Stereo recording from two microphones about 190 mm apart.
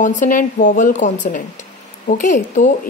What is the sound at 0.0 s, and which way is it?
A woman's voice, 40° left (ahead or behind).